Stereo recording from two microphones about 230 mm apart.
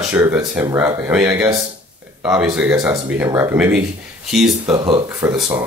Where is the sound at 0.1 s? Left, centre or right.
Centre.